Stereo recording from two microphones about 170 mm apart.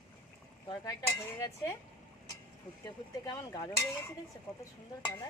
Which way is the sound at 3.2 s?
20° left (ahead or behind).